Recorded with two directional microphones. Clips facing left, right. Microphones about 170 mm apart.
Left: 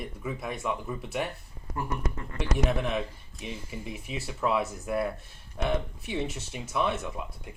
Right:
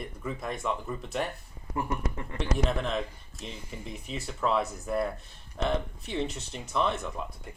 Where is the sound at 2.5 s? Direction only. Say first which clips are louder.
Left 1 dB; 10° left (ahead or behind).